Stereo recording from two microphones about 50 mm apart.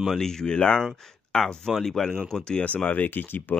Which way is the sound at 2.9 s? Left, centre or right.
Left.